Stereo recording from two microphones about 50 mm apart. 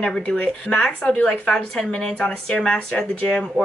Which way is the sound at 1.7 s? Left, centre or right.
Centre.